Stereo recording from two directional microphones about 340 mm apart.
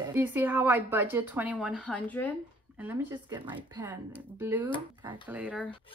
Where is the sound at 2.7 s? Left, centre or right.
Centre.